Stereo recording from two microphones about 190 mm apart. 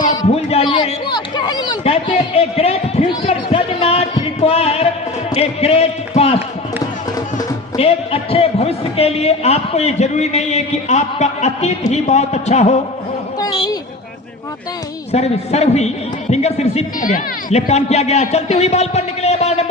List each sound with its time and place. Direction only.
0.0 s a sound: 20° left (ahead or behind)
7.8 s a man's voice: 30° left (ahead or behind)
13.4 s a woman's voice: 25° left (ahead or behind)
15.1 s a man's voice: 35° left (ahead or behind)